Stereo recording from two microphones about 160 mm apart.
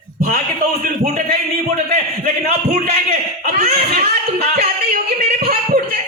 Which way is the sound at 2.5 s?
40° right (ahead or behind).